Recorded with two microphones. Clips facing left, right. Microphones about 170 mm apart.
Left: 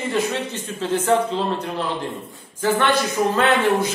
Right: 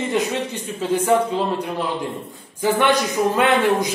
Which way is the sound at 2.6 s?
15° right (ahead or behind).